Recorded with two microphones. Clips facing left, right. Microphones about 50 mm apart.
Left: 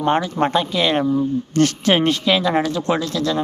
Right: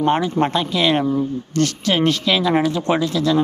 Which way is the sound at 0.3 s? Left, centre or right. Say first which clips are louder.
Even; centre.